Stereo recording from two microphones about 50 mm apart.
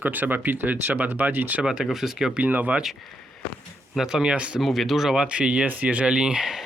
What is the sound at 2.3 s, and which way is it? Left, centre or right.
Speech, right.